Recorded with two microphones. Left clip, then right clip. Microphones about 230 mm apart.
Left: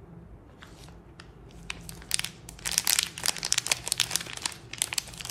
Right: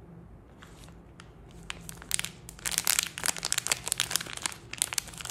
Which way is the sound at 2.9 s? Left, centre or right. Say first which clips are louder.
Left 3 dB; centre.